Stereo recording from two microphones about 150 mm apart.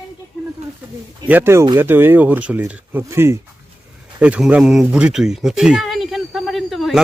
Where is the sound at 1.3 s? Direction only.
15° right (ahead or behind).